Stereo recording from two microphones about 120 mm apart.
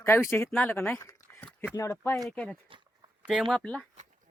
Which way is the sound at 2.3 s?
10° left (ahead or behind).